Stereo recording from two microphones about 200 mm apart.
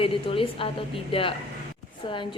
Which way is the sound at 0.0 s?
25° left (ahead or behind).